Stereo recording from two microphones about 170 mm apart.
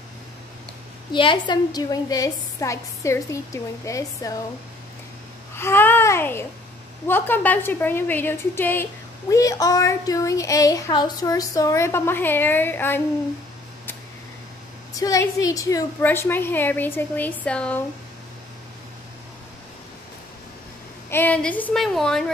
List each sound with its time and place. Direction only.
1.1 s speech: 30° left (ahead or behind)
5.6 s a child's voice: 15° left (ahead or behind)
15.0 s a woman's voice: 20° left (ahead or behind)
21.1 s speech: 10° left (ahead or behind)